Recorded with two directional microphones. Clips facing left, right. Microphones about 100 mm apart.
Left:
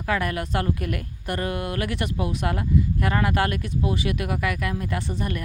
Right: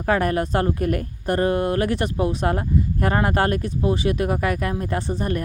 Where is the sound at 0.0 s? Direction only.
40° right (ahead or behind).